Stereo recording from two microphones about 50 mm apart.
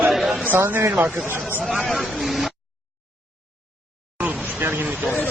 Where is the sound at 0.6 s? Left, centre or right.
Right.